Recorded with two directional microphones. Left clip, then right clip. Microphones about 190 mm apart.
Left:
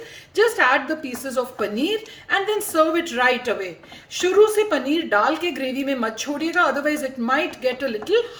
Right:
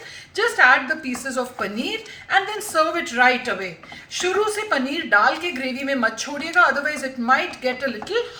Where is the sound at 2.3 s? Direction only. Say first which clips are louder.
Right 1 dB; 45° left (ahead or behind).